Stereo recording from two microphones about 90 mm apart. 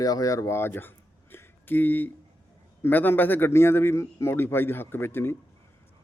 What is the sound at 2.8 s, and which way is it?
A man's voice, 20° left (ahead or behind).